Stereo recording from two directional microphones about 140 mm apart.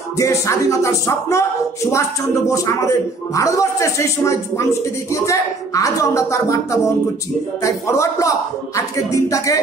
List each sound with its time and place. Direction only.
0.2 s speech: 20° left (ahead or behind)